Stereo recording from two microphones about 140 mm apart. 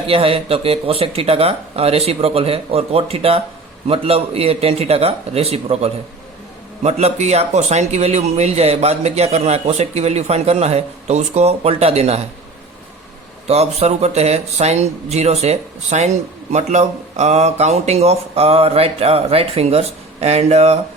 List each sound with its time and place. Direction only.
0.1 s speech: 40° right (ahead or behind)
13.5 s speech: 50° right (ahead or behind)